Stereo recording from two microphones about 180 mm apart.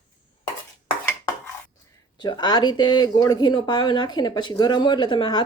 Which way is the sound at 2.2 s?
25° left (ahead or behind).